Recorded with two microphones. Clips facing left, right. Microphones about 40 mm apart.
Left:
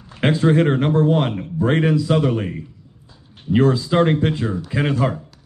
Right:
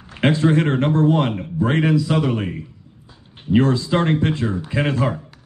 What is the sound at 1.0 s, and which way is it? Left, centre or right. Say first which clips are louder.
Speech: right 1 dB; right.